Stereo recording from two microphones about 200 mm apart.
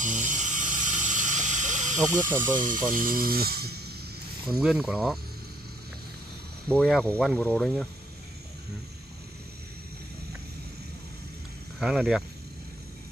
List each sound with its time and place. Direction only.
0.0 s a sound: 40° right (ahead or behind)
2.5 s speech: 40° right (ahead or behind)
4.5 s speech: centre (ahead or behind)
6.7 s speech: 5° left (ahead or behind)
11.8 s speech: centre (ahead or behind)